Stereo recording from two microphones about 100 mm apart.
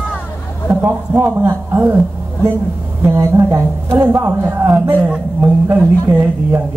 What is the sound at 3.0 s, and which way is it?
Speech, 25° right (ahead or behind).